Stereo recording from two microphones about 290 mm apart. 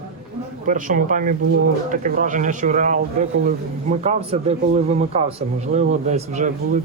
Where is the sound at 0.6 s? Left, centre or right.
Right.